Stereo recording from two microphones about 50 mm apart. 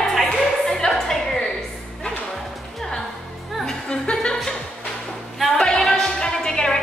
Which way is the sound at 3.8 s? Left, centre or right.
Centre.